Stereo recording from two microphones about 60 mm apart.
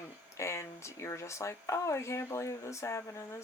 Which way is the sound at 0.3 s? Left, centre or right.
Left.